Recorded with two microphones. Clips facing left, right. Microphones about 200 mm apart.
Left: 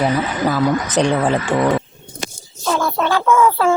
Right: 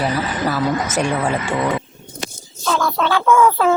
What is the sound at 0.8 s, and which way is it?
Speech, 35° left (ahead or behind).